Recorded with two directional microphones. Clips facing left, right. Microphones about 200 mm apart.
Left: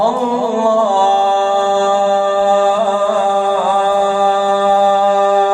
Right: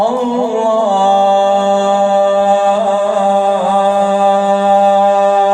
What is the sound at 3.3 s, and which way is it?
Music, 20° right (ahead or behind).